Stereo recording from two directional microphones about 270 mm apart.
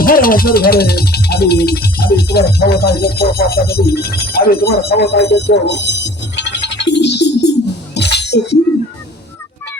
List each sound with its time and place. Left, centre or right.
0.0 s speech: left
7.9 s music: left